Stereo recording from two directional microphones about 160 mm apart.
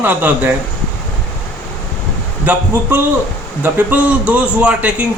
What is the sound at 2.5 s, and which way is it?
A man's voice, 10° right (ahead or behind).